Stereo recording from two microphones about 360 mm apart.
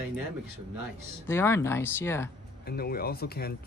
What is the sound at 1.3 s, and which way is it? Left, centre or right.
Speech, centre.